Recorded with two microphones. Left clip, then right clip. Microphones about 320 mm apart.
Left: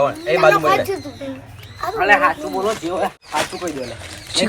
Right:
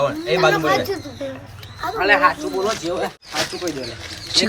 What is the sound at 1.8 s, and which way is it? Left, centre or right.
Speech, centre.